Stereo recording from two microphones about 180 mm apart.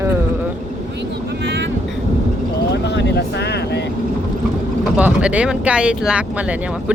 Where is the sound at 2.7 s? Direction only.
70° left (ahead or behind).